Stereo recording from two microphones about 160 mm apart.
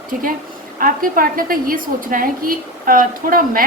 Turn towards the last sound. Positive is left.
turn(degrees=-65)  # may be behind; listen again after turning